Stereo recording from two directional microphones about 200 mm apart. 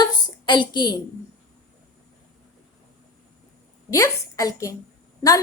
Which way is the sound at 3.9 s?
15° left (ahead or behind).